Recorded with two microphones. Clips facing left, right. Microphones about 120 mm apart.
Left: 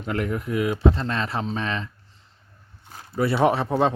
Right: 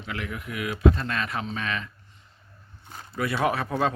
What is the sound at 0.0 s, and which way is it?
Speech, 45° left (ahead or behind).